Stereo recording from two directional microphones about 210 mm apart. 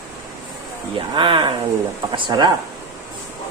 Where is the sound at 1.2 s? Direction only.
20° right (ahead or behind).